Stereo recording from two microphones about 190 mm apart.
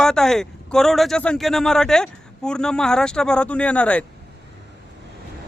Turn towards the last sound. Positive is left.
turn(degrees=5)  # may be behind; listen again after turning